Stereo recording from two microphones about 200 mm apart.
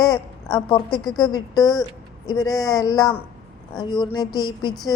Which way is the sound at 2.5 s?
Centre (ahead or behind).